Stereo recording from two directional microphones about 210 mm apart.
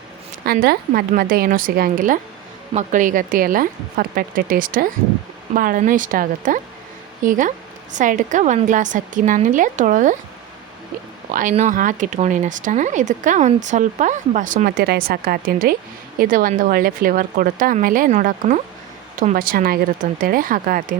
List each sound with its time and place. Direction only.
0.4 s a woman's voice: 45° right (ahead or behind)
11.3 s speech: 40° right (ahead or behind)